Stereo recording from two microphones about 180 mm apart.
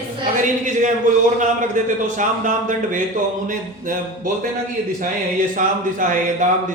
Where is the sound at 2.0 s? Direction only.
45° right (ahead or behind).